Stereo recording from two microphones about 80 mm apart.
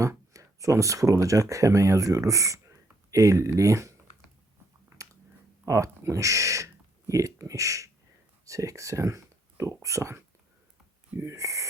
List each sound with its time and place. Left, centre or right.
0.0 s speech: right
5.0 s chewing: right
5.6 s speech: right